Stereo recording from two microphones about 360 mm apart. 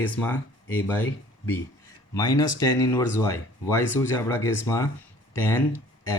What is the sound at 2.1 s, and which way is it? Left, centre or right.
Speech, centre.